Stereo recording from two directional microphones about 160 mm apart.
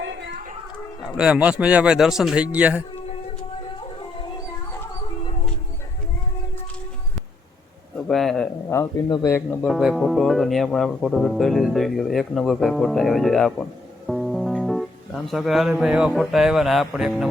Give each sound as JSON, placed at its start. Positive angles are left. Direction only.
{"t": 0.0, "sound": "a sound", "side_deg": -90}
{"t": 1.1, "sound": "a man's voice", "side_deg": -5}
{"t": 4.2, "sound": "howl", "side_deg": 20}
{"t": 5.2, "sound": "howl", "side_deg": 40}
{"t": 7.9, "sound": "a man's voice", "side_deg": 0}
{"t": 8.7, "sound": "speech", "side_deg": 20}
{"t": 9.6, "sound": "speech", "side_deg": 0}